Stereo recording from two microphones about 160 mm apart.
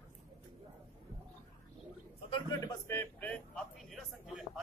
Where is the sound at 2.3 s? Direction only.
25° left (ahead or behind); by 4.6 s 5° right (ahead or behind).